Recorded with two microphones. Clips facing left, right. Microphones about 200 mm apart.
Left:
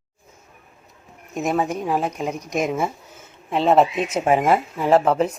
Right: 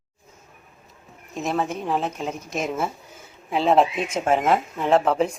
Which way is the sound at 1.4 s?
10° left (ahead or behind).